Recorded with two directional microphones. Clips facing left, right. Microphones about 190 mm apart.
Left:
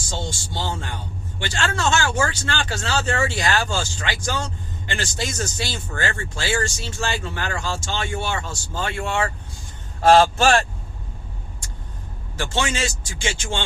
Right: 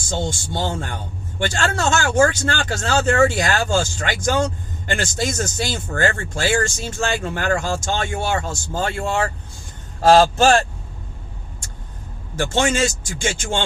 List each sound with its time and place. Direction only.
0.1 s speech: 50° right (ahead or behind)
12.4 s speech: 45° right (ahead or behind)